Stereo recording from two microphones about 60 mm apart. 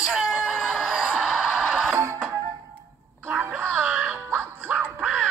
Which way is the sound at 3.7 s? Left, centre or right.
Centre.